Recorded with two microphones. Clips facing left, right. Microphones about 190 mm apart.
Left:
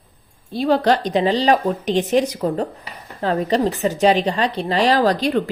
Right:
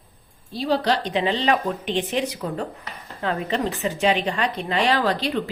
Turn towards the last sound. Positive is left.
turn(degrees=45)  # may be behind; listen again after turning